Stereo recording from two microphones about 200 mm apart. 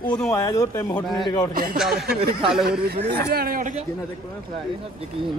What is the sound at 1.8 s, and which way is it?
Speech, centre (ahead or behind).